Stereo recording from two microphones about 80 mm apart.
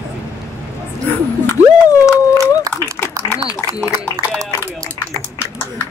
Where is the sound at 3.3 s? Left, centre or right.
Left.